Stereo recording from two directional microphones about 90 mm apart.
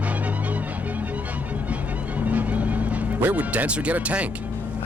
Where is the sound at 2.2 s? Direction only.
15° right (ahead or behind).